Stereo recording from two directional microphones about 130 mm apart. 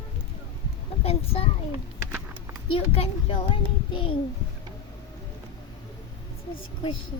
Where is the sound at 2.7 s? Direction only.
45° left (ahead or behind).